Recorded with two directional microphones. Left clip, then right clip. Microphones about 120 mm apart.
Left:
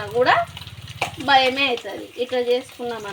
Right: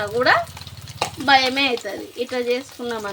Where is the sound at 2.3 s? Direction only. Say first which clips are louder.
Left 2 dB; 30° right (ahead or behind).